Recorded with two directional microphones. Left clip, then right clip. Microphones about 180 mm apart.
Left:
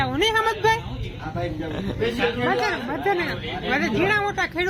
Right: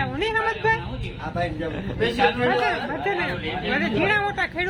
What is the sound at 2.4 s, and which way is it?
Speech, 15° left (ahead or behind).